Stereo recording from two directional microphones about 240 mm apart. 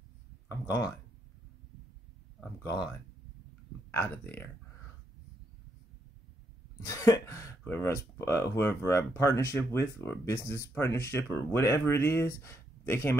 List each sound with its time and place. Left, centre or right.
0.5 s speech: centre
2.6 s speech: centre
3.9 s speech: centre
6.8 s speech: centre